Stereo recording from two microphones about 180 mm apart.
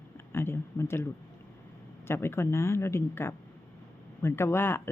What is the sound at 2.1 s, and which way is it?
Speech, 15° left (ahead or behind).